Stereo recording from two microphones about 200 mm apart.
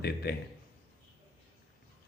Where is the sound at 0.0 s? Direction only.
50° left (ahead or behind).